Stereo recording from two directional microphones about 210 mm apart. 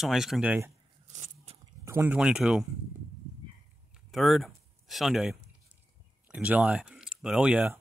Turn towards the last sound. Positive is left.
turn(degrees=-5)  # may be behind; listen again after turning